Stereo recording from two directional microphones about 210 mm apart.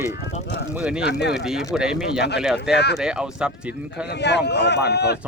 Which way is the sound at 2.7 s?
55° left (ahead or behind).